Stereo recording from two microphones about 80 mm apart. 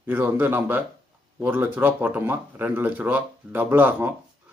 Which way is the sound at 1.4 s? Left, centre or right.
Right.